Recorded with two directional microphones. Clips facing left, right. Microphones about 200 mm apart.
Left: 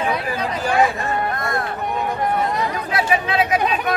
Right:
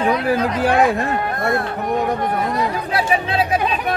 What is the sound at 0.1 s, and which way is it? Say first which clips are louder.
Speech: right 5 dB; centre (ahead or behind).